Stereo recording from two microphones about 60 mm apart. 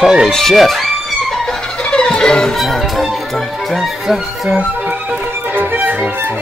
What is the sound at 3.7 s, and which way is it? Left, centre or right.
Speech, centre.